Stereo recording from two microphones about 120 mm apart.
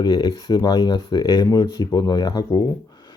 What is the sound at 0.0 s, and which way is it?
Speech, 40° left (ahead or behind).